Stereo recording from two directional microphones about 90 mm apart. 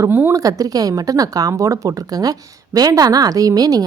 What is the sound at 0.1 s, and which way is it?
Speech, 25° right (ahead or behind).